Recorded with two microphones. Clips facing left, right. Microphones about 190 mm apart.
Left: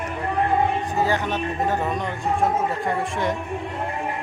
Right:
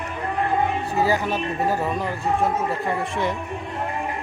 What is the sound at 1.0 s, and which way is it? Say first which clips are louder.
A man's voice: right 2 dB; 10° right (ahead or behind).